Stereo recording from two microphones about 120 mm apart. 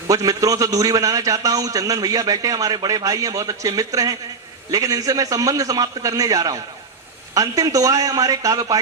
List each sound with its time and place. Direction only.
0.1 s a man's voice: 30° right (ahead or behind)